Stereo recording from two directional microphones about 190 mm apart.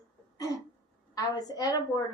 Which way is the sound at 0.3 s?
20° left (ahead or behind).